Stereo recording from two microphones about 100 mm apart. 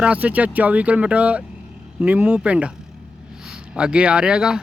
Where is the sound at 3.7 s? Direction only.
10° right (ahead or behind).